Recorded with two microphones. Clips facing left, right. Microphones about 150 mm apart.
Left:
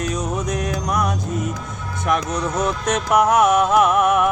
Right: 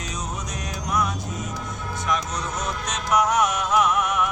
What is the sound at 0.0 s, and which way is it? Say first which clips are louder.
Music: left 9 dB; 55° left (ahead or behind).